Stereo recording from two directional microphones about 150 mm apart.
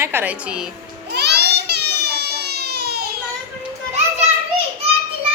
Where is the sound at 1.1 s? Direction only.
90° right.